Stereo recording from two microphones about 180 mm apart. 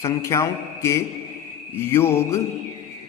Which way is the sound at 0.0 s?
15° left (ahead or behind).